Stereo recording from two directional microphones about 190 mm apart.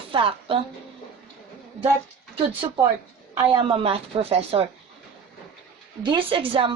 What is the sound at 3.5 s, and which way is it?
Speech, 30° right (ahead or behind).